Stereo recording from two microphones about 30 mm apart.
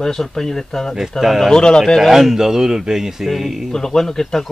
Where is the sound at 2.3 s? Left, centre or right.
Centre.